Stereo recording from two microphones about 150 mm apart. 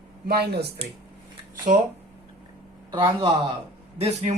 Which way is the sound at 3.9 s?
45° right (ahead or behind).